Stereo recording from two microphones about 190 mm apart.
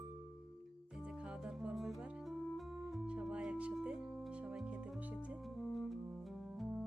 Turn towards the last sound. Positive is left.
turn(degrees=0)  # may be behind; listen again after turning